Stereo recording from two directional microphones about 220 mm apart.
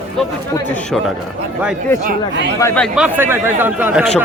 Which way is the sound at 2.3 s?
55° right (ahead or behind).